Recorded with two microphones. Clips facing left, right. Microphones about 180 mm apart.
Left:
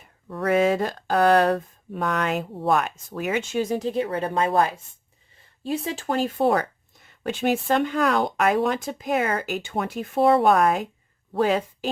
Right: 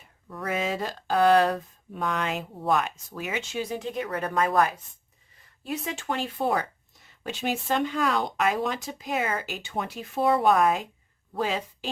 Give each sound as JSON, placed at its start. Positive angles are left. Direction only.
{"t": 0.3, "sound": "speech", "side_deg": 60}
{"t": 10.2, "sound": "speech", "side_deg": 65}